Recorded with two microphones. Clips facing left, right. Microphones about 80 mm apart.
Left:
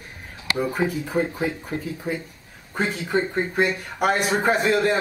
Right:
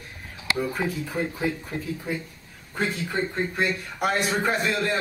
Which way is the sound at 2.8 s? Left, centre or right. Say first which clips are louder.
Left 3 dB; centre.